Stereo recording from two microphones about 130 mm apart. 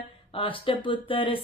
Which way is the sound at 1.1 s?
40° left (ahead or behind).